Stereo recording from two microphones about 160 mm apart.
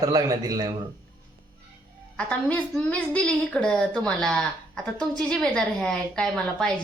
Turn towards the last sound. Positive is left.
turn(degrees=5)  # may be behind; listen again after turning